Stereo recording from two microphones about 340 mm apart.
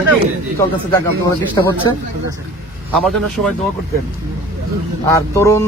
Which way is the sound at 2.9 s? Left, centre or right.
Centre.